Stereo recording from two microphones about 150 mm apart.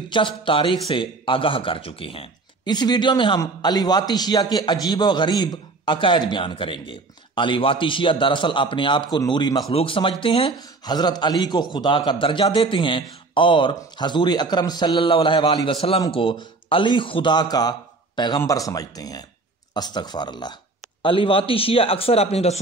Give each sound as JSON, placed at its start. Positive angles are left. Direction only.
{"t": 0.1, "sound": "a man's voice", "side_deg": 35}
{"t": 9.7, "sound": "a man's voice", "side_deg": 40}